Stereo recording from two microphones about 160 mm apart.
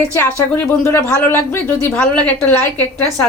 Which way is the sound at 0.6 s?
5° left (ahead or behind).